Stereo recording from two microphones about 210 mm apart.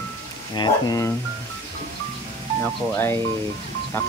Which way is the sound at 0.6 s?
20° left (ahead or behind).